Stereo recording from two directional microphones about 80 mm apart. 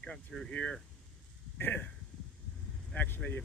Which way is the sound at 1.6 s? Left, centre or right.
Left.